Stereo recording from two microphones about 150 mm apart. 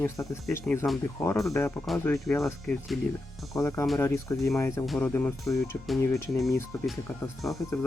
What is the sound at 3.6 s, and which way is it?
Speech, 20° left (ahead or behind).